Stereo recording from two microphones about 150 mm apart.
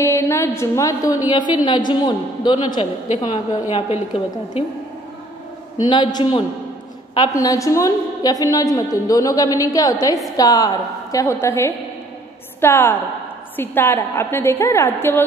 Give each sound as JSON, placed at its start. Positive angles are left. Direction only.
{"t": 0.0, "sound": "a woman's voice", "side_deg": 20}
{"t": 3.7, "sound": "a woman's voice", "side_deg": 40}
{"t": 5.8, "sound": "a woman's voice", "side_deg": 30}